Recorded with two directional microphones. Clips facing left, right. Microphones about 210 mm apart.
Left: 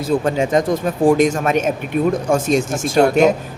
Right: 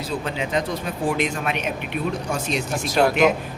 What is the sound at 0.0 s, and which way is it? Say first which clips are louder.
A man's voice: left 9 dB; 50° left (ahead or behind).